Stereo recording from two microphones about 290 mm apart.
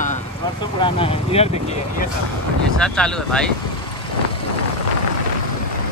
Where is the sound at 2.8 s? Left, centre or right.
Centre.